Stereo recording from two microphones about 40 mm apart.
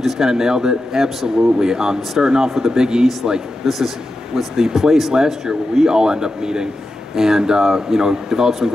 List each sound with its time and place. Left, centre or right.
0.0 s speech: centre
3.6 s a man's voice: centre
5.1 s speech: centre